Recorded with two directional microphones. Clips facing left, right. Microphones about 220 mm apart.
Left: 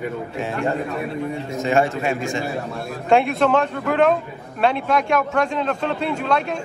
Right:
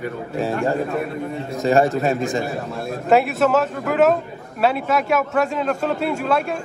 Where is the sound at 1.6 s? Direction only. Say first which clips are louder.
Right 3 dB; 40° right (ahead or behind).